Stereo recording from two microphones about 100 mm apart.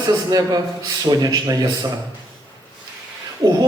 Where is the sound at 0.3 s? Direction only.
40° right (ahead or behind).